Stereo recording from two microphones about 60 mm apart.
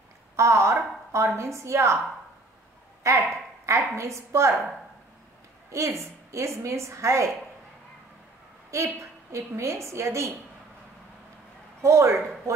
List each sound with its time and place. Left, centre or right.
0.4 s a woman's voice: right
3.0 s a woman's voice: right
5.7 s a woman's voice: right
8.6 s a woman's voice: right
11.8 s a woman's voice: right